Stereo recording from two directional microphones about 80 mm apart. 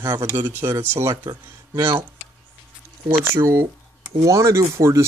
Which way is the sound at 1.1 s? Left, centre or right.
Right.